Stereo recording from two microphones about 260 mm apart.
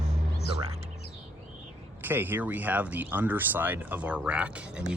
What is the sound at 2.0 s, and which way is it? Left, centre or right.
Speech, centre.